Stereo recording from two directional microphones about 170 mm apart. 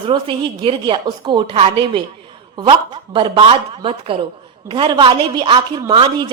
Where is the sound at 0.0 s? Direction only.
30° right (ahead or behind).